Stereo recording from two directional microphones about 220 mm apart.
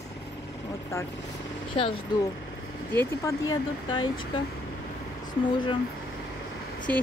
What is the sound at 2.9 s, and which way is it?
Speech, 10° left (ahead or behind).